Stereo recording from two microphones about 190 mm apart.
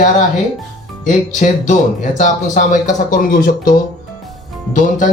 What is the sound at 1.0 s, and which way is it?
Speech, 40° left (ahead or behind).